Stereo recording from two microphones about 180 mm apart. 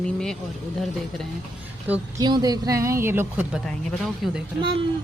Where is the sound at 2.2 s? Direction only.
20° right (ahead or behind); by 4.4 s centre (ahead or behind).